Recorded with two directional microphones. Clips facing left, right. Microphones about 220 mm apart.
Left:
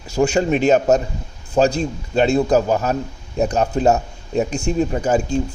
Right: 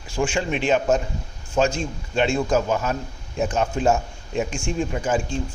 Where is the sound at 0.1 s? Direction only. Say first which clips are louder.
Left 7 dB; 40° left (ahead or behind).